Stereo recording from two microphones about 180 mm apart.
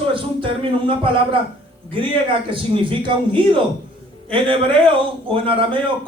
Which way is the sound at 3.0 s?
30° right (ahead or behind).